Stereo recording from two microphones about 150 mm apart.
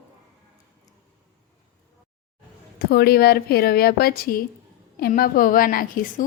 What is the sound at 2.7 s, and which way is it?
A woman's voice, 90° left.